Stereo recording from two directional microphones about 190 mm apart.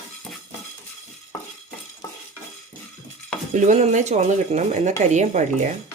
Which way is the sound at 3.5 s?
40° right (ahead or behind).